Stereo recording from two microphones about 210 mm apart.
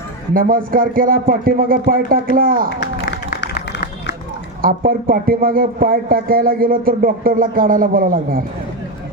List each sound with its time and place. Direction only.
0.3 s speech: 40° right (ahead or behind)
2.6 s run: 50° left (ahead or behind)
4.6 s speech: 45° right (ahead or behind)